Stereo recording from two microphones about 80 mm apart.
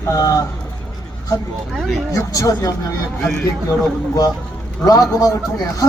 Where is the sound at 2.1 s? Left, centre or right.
Left.